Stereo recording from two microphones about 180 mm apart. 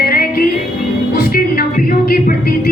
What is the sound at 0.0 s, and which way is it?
Music, 55° left (ahead or behind).